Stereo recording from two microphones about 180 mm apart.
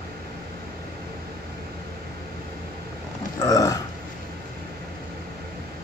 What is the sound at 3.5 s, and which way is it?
Burping, 20° left (ahead or behind).